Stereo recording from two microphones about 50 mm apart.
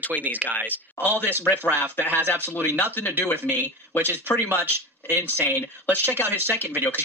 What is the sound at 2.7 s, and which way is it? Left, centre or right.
Speech, left.